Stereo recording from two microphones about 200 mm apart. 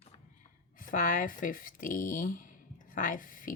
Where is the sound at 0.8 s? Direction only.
40° left (ahead or behind).